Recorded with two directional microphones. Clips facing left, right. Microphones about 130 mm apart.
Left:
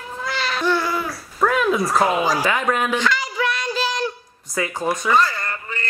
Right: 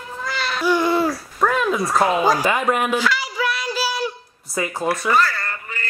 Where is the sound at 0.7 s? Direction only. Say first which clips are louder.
Right 4 dB; 15° right (ahead or behind).